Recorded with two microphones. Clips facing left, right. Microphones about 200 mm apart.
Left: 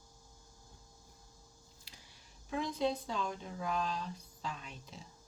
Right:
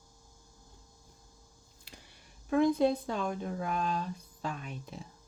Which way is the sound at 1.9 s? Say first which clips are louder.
Right 9 dB; 55° right (ahead or behind).